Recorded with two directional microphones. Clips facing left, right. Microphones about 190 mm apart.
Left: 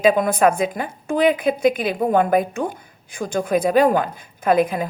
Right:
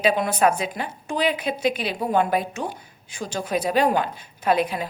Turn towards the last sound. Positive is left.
turn(degrees=50)  # may be behind; listen again after turning